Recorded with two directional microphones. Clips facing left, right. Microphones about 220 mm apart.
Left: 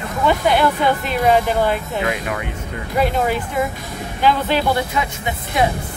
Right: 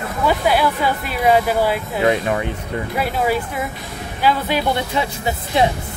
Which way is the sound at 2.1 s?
30° right (ahead or behind).